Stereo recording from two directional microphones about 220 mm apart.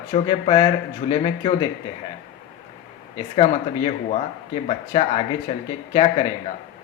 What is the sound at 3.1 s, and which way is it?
Speech, 25° left (ahead or behind).